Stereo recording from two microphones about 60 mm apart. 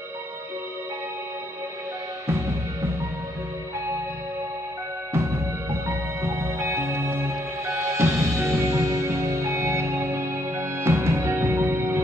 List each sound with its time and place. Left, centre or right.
5.7 s music: right